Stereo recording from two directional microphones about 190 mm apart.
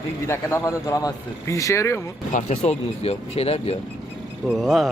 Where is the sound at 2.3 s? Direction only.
35° left (ahead or behind).